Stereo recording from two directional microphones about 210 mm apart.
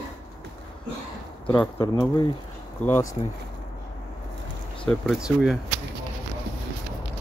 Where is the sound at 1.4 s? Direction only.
5° left (ahead or behind).